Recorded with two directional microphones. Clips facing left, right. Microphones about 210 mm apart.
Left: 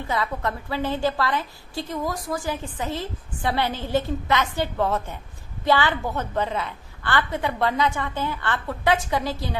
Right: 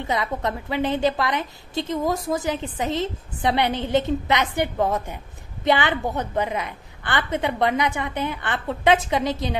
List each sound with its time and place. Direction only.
0.0 s a woman's voice: 20° right (ahead or behind)